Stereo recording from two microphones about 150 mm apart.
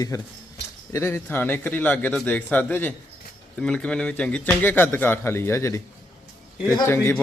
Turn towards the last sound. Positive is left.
turn(degrees=15)  # may be behind; listen again after turning